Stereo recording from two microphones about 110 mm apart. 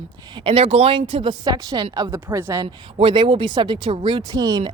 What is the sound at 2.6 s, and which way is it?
Speech, 55° right (ahead or behind).